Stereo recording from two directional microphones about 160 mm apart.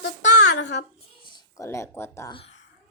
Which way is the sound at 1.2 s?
30° left (ahead or behind).